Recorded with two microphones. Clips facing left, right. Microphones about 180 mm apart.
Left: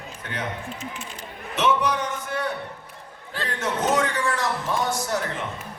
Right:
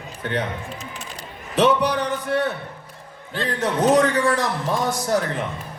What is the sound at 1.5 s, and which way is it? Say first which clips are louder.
Music: right 4 dB; 35° right (ahead or behind).